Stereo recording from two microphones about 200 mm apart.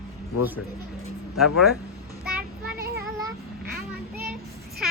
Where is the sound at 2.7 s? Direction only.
50° right (ahead or behind).